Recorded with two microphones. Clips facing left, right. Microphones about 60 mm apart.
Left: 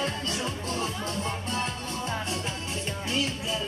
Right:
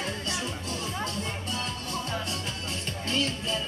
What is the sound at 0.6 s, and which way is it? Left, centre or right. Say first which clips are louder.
Music: left 2 dB; left.